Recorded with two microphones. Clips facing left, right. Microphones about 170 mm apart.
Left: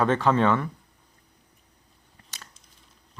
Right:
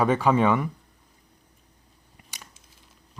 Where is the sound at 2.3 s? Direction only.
15° right (ahead or behind).